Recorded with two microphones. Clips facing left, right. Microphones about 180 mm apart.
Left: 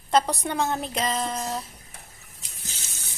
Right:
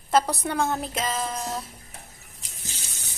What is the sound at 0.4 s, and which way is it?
Sizzle, centre (ahead or behind).